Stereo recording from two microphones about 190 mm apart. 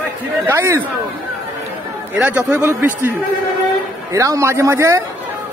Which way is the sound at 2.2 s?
10° right (ahead or behind).